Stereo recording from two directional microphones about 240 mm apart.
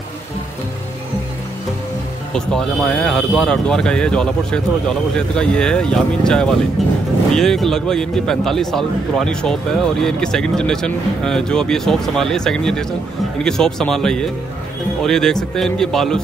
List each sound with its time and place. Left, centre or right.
2.3 s speech: centre